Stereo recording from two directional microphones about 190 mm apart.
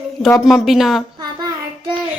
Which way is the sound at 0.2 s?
Centre (ahead or behind).